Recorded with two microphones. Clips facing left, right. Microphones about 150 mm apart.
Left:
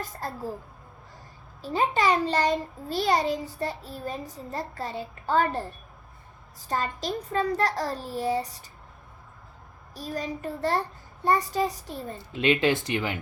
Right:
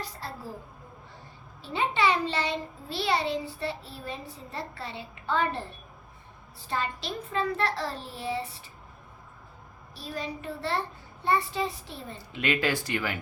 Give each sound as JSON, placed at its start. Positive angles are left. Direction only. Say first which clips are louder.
{"t": 0.0, "sound": "a woman's voice", "louder": "left 4 dB", "side_deg": 50}
{"t": 1.6, "sound": "a child's voice", "louder": "left 2 dB", "side_deg": 40}
{"t": 9.9, "sound": "a child's voice", "louder": "left 3 dB", "side_deg": 45}
{"t": 12.4, "sound": "speech", "louder": "left 5 dB", "side_deg": 25}